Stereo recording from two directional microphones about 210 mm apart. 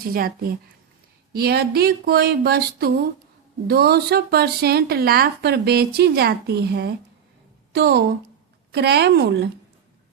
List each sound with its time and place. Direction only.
0.0 s a woman's voice: 45° right (ahead or behind)